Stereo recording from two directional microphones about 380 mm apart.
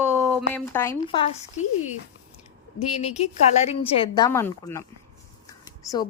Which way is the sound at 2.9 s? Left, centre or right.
Centre.